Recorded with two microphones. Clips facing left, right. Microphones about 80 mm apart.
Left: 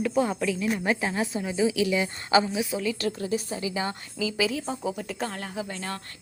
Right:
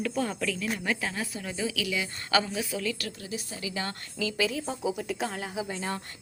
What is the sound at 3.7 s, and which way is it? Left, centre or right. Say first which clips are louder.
A woman's voice: left 4 dB; centre.